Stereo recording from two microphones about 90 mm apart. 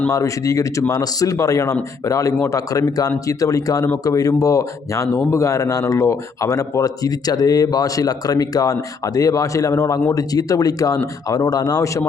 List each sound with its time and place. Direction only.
0.1 s speech: 35° left (ahead or behind)